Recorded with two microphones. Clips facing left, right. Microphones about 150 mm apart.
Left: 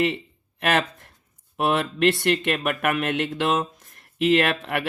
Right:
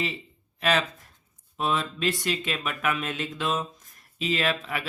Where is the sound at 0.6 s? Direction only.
60° left (ahead or behind).